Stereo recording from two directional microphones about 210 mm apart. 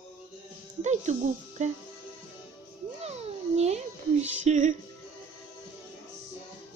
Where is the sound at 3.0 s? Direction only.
30° right (ahead or behind).